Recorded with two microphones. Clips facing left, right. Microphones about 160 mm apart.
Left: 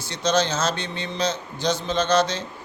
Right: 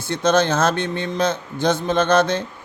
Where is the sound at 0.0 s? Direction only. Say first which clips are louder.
Right 5 dB; 55° right (ahead or behind).